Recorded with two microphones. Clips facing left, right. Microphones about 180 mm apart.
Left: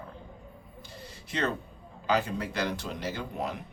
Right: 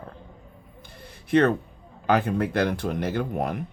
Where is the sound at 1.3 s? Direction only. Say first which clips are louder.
Right 11 dB; 55° right (ahead or behind).